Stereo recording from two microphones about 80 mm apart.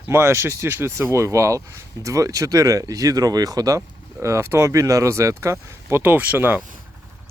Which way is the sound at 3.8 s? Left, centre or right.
Right.